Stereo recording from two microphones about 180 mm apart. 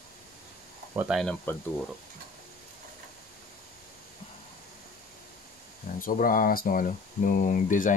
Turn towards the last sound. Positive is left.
turn(degrees=45)  # may be behind; listen again after turning